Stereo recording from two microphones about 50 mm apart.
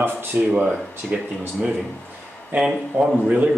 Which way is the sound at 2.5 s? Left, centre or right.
Right.